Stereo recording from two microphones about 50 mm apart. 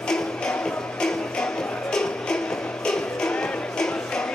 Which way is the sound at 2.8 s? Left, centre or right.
Centre.